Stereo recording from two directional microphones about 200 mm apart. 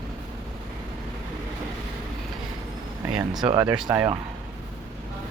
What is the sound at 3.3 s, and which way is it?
Speech, 20° right (ahead or behind).